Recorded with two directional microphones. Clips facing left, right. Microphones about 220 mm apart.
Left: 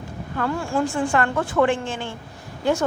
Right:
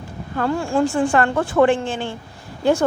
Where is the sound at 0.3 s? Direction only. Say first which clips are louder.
Right 4 dB; 30° right (ahead or behind).